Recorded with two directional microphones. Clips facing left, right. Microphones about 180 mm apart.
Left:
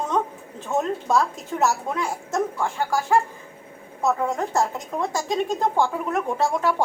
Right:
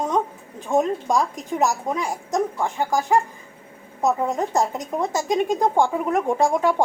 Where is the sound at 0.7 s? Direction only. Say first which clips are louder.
Right 2 dB; 15° right (ahead or behind).